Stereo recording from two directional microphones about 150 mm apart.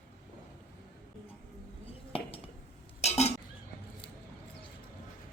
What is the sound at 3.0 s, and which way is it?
Dishes, 45° left (ahead or behind).